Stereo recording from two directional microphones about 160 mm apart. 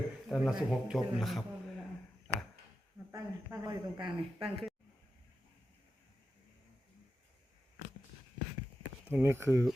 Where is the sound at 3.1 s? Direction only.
20° right (ahead or behind).